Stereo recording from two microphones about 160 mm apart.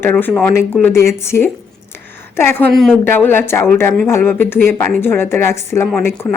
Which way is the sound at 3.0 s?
15° left (ahead or behind).